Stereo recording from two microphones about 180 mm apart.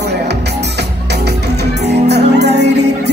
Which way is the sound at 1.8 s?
70° right (ahead or behind).